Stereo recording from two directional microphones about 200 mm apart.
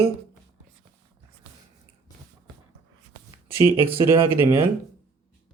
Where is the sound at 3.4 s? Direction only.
10° right (ahead or behind).